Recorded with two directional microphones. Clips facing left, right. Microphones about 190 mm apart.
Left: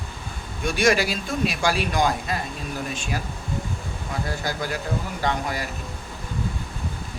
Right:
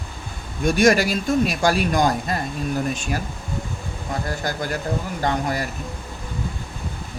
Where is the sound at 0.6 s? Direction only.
45° right (ahead or behind).